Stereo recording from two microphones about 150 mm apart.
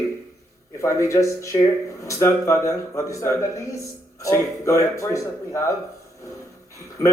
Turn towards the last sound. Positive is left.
turn(degrees=20)  # may be behind; listen again after turning